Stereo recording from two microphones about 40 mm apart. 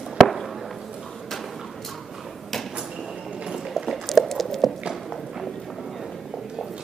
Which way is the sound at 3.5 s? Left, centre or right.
Centre.